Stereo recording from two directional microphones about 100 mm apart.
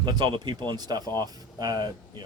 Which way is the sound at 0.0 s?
50° right (ahead or behind).